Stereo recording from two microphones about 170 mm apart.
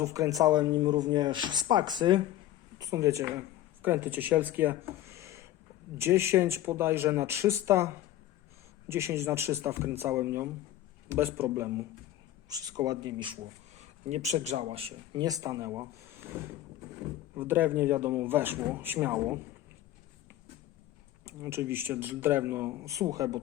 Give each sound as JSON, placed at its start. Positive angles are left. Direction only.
{"t": 0.0, "sound": "a man's voice", "side_deg": -20}
{"t": 8.9, "sound": "a man's voice", "side_deg": -15}
{"t": 13.7, "sound": "speech", "side_deg": -45}
{"t": 17.3, "sound": "a man's voice", "side_deg": -10}
{"t": 21.2, "sound": "a man's voice", "side_deg": -15}